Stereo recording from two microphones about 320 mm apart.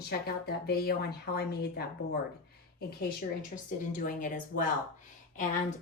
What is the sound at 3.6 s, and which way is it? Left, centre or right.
A woman's voice, left.